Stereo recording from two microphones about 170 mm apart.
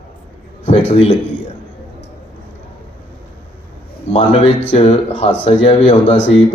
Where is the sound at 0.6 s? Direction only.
35° left (ahead or behind).